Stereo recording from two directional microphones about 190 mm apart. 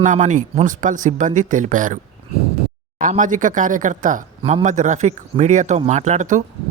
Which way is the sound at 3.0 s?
40° right (ahead or behind).